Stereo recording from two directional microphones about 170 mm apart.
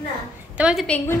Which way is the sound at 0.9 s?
10° left (ahead or behind).